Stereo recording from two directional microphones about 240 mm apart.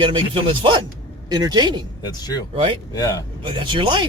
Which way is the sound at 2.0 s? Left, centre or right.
Centre.